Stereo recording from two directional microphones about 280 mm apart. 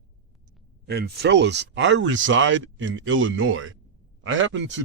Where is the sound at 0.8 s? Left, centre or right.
Right.